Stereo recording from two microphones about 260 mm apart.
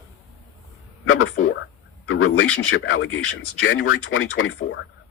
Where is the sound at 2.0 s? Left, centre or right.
Left.